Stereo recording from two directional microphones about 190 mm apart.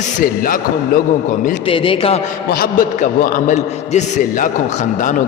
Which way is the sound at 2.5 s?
50° left (ahead or behind).